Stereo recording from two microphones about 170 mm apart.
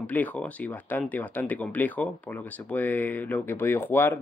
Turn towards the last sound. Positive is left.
turn(degrees=15)  # may be behind; listen again after turning